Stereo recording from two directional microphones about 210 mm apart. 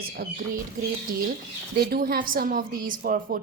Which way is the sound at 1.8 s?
45° right (ahead or behind).